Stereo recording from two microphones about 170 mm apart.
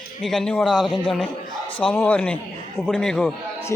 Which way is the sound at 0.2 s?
Centre (ahead or behind).